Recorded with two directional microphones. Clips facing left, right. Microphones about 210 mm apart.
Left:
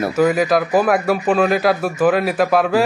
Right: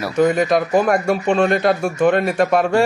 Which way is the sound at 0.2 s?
5° left (ahead or behind).